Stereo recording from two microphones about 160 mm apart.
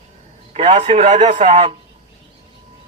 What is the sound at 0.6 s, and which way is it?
A man's voice, 45° right (ahead or behind).